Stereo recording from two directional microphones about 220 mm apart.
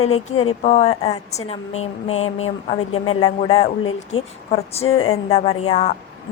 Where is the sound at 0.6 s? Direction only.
30° left (ahead or behind).